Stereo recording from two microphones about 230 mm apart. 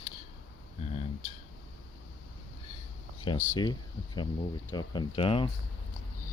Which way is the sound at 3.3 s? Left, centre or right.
Centre.